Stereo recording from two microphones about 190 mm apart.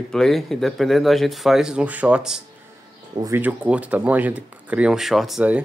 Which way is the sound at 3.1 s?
15° right (ahead or behind).